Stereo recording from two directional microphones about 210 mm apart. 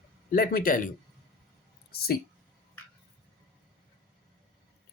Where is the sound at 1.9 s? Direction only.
45° left (ahead or behind).